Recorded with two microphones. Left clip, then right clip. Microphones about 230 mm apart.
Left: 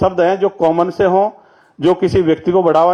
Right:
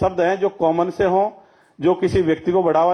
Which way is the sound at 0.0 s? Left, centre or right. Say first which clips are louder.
Left 5 dB; left.